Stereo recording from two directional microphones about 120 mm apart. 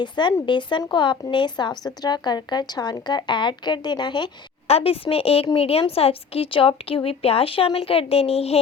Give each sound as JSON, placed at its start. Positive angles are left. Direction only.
{"t": 0.0, "sound": "a woman's voice", "side_deg": 40}
{"t": 4.7, "sound": "a woman's voice", "side_deg": 50}